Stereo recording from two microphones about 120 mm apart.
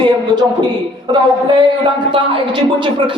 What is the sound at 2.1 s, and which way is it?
A man's voice, 45° right (ahead or behind).